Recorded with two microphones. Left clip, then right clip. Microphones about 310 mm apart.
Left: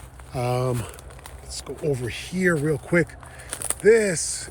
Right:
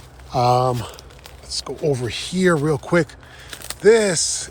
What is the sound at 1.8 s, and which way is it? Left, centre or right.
Speech, right.